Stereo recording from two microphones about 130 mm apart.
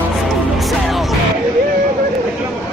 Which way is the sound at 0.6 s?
Centre (ahead or behind).